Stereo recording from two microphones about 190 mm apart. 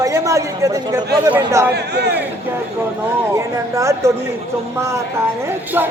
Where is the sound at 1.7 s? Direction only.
60° right (ahead or behind).